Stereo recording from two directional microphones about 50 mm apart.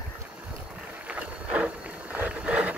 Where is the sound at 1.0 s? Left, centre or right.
Right.